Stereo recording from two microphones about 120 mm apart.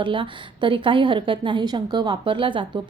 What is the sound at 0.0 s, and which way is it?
A woman's voice, 45° right (ahead or behind).